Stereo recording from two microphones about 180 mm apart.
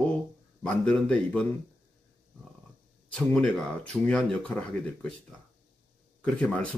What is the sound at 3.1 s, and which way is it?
Speech, 5° left (ahead or behind).